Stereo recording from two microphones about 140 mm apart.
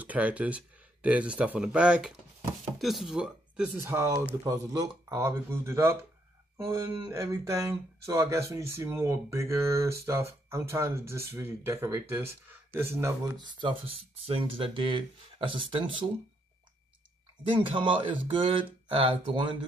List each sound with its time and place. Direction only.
0.0 s speech: 10° right (ahead or behind)
3.8 s speech: 20° right (ahead or behind)
13.4 s speech: 35° right (ahead or behind)
17.6 s speech: 35° right (ahead or behind)